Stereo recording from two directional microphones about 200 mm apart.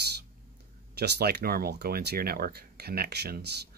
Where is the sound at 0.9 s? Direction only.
55° right (ahead or behind).